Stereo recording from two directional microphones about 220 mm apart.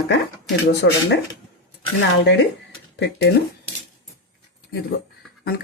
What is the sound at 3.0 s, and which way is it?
Speech, 50° left (ahead or behind).